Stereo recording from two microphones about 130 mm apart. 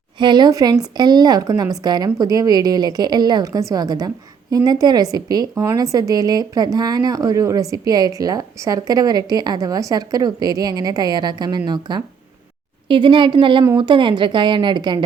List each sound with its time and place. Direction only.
0.2 s speech: 35° right (ahead or behind)